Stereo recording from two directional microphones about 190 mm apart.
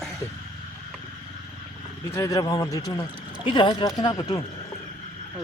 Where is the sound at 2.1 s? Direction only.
15° left (ahead or behind).